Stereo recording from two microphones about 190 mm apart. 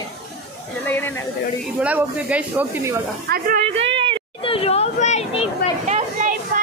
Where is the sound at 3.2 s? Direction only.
50° right (ahead or behind).